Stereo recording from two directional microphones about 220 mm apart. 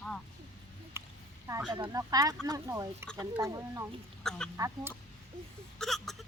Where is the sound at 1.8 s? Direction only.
15° right (ahead or behind).